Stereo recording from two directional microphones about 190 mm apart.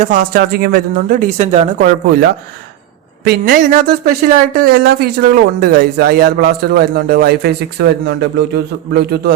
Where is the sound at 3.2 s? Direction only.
50° right (ahead or behind).